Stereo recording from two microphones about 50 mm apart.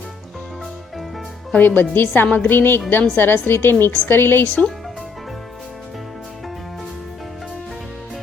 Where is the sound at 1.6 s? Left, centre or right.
Left.